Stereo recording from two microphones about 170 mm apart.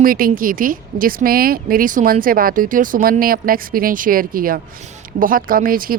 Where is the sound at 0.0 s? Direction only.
55° right (ahead or behind).